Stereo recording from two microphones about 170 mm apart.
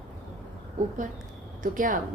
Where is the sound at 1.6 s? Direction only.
55° right (ahead or behind).